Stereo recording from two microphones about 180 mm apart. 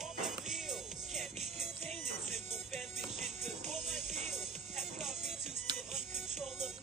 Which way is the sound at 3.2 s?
40° right (ahead or behind).